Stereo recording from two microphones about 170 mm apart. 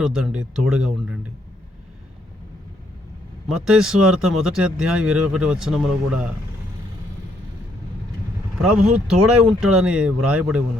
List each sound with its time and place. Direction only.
0.0 s speech: 5° right (ahead or behind)
3.5 s speech: 5° right (ahead or behind)
9.0 s speech: 5° right (ahead or behind)